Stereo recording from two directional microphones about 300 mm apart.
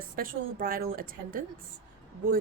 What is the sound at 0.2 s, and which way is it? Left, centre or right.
A woman's voice, right.